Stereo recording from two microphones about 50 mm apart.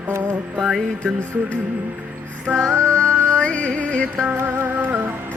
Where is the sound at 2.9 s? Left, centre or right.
Left.